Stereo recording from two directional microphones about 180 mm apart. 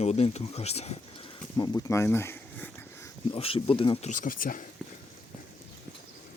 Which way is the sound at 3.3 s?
30° left (ahead or behind).